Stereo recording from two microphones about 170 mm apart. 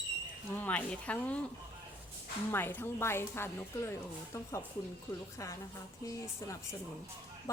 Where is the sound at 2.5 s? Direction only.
15° left (ahead or behind).